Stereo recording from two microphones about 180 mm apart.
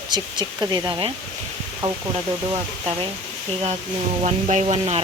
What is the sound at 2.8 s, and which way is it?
Speech, 30° right (ahead or behind).